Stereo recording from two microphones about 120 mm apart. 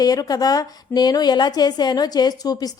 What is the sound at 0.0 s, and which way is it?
A woman's voice, 30° left (ahead or behind).